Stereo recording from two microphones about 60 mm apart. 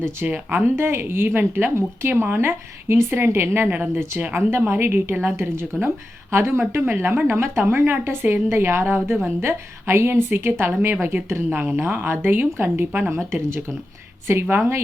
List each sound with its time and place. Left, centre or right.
0.2 s a woman's voice: right
1.7 s a woman's voice: right
5.4 s a woman's voice: right
13.1 s a woman's voice: right